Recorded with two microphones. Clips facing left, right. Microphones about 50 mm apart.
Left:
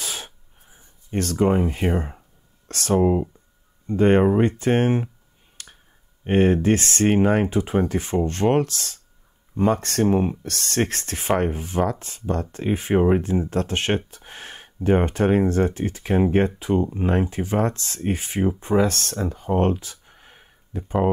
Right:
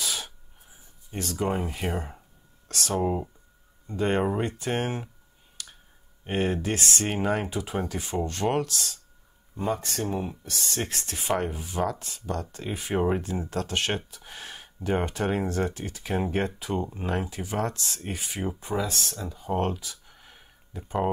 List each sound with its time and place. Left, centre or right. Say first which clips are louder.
0.0 s sneeze: even; left
1.1 s speech: left 8 dB; left
1.4 s speech: left 8 dB; centre
2.7 s speech: left 8 dB; left
3.0 s speech: left 8 dB; centre
3.8 s speech: left 9 dB; left
5.6 s finger snapping: even; left
6.2 s speech: left 9 dB; left
12.9 s speech: left 7 dB; left
13.2 s speech: left 7 dB; left
18.9 s speech: left 7 dB; left
19.5 s a sound: left 6 dB; left